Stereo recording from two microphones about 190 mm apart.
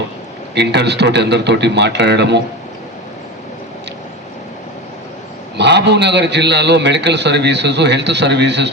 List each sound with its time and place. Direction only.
0.5 s a man's voice: 60° right (ahead or behind)
5.5 s a man's voice: 65° right (ahead or behind)